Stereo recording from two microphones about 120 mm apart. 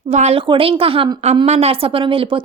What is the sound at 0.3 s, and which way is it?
Speech, 45° right (ahead or behind).